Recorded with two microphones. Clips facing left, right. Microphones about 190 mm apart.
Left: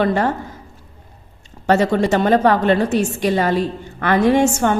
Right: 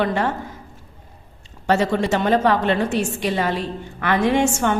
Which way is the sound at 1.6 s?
45° left (ahead or behind).